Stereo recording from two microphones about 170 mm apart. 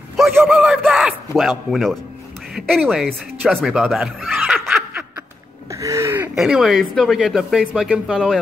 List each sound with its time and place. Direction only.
0.5 s a sound: 5° right (ahead or behind)
2.5 s speech: centre (ahead or behind)
3.4 s snicker: 5° right (ahead or behind)
5.7 s throat clearing: 20° right (ahead or behind)
6.3 s speech: centre (ahead or behind)